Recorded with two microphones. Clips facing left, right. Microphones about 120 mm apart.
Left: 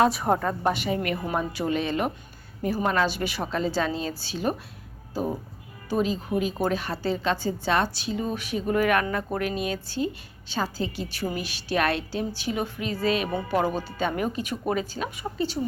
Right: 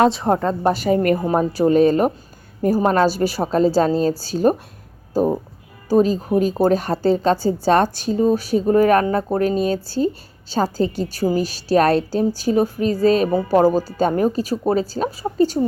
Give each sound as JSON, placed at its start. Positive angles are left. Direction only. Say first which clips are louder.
{"t": 0.0, "sound": "a woman's voice", "louder": "right 5 dB", "side_deg": -25}